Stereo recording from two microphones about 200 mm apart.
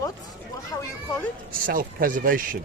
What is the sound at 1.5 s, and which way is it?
Speech, 45° right (ahead or behind).